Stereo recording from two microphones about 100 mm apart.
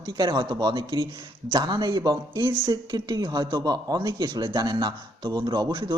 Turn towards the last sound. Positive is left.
turn(degrees=-45)  # may be behind; listen again after turning